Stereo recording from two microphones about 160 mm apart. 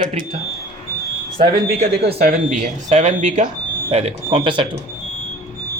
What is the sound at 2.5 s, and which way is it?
Speech, 45° right (ahead or behind).